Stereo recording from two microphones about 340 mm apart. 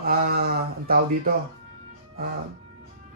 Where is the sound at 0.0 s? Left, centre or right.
Right.